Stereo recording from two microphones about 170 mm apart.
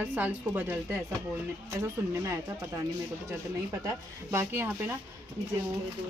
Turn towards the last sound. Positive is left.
turn(degrees=-10)  # may be behind; listen again after turning